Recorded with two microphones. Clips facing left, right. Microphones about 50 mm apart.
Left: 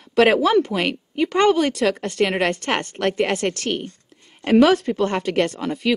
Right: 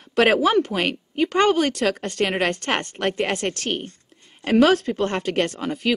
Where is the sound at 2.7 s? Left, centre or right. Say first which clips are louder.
Left 2 dB; centre.